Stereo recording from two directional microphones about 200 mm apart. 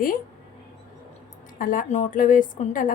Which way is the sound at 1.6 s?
45° left (ahead or behind).